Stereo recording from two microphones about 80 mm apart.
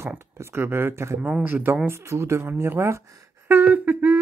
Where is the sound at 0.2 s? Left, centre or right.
Right.